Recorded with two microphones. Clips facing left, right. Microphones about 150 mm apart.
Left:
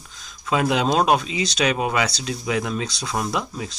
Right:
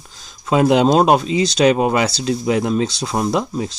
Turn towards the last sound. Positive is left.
turn(degrees=-30)  # may be behind; listen again after turning